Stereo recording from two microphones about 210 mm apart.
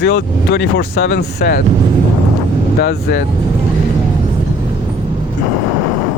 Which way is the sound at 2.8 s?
50° left (ahead or behind).